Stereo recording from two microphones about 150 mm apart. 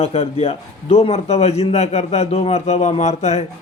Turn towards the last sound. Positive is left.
turn(degrees=45)  # may be behind; listen again after turning